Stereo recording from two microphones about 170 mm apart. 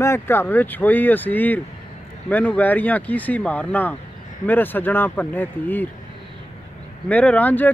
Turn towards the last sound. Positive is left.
turn(degrees=10)  # may be behind; listen again after turning